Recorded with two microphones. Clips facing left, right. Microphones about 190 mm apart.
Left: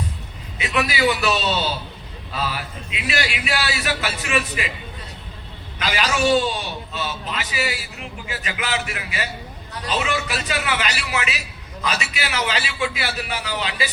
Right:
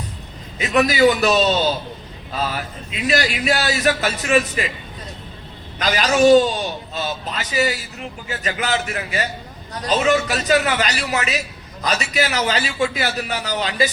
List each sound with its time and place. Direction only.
0.6 s a man's voice: 40° right (ahead or behind)
5.8 s a man's voice: 40° right (ahead or behind)